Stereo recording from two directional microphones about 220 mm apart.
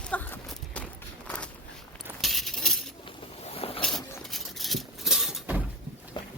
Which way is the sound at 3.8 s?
Centre (ahead or behind).